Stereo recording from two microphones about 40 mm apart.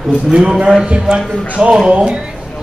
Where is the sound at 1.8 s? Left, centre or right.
Right.